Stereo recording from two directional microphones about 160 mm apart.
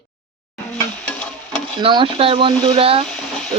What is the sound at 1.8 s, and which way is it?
Speech, 30° right (ahead or behind).